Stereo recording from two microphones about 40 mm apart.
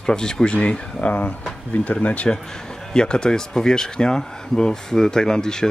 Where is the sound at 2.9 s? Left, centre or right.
Centre.